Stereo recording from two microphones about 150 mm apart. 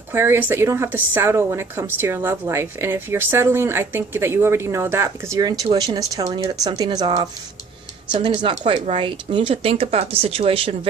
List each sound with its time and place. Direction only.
0.1 s speech: 15° right (ahead or behind); by 10.9 s 40° right (ahead or behind)